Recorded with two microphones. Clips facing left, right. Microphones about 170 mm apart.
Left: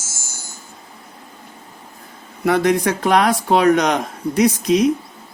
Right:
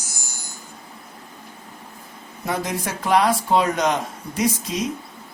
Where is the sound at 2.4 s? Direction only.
70° left (ahead or behind).